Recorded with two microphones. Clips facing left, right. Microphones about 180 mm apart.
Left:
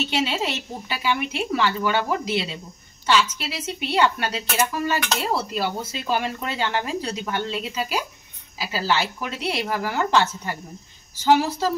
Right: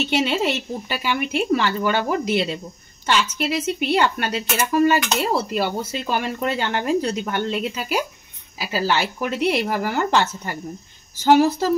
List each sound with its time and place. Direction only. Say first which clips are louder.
0.2 s speech: right 4 dB; 55° right (ahead or behind)